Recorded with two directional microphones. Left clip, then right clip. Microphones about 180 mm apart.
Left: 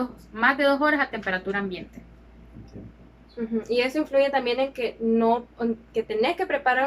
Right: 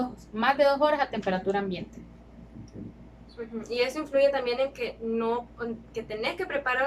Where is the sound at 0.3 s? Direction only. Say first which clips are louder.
Left 2 dB; 20° right (ahead or behind).